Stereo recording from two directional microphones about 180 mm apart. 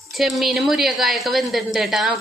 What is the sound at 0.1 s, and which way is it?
A woman's voice, centre (ahead or behind).